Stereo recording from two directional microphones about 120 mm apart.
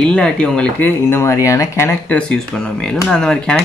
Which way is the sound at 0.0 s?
10° left (ahead or behind).